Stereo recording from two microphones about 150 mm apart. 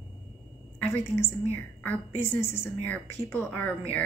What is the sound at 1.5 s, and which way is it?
A woman's voice, 15° left (ahead or behind).